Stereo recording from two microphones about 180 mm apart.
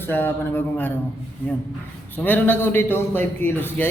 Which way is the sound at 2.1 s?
10° left (ahead or behind).